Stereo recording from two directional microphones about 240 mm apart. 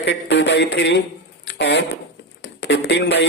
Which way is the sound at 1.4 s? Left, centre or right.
Left.